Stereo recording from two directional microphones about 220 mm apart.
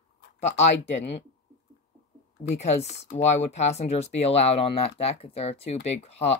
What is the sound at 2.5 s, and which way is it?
Speech, 30° left (ahead or behind).